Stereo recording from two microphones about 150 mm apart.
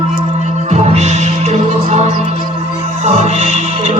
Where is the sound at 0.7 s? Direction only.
50° right (ahead or behind).